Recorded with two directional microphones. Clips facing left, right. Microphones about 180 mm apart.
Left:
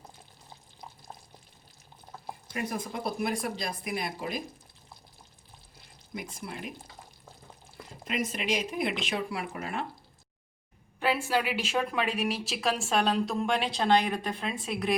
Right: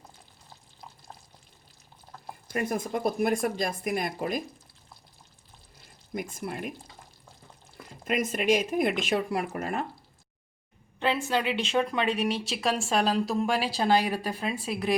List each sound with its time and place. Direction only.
2.1 s a sound: 10° left (ahead or behind)
2.5 s speech: 50° right (ahead or behind)
6.1 s speech: 50° right (ahead or behind)
8.0 s speech: 50° right (ahead or behind)
11.0 s a woman's voice: 10° left (ahead or behind)